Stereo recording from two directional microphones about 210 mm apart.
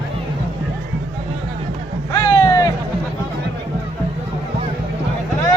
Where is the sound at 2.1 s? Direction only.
15° left (ahead or behind).